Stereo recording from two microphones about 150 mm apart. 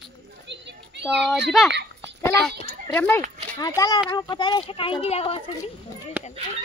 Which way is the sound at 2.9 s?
15° left (ahead or behind).